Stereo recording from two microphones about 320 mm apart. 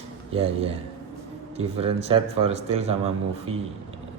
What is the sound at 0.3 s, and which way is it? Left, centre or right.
A man's voice, centre.